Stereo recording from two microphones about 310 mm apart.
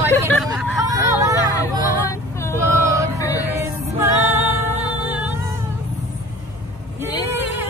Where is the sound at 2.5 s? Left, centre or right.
Centre.